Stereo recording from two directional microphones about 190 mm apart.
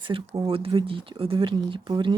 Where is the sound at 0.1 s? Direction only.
25° right (ahead or behind).